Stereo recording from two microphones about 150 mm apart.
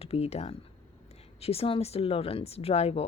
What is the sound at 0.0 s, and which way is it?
A woman's voice, 40° left (ahead or behind).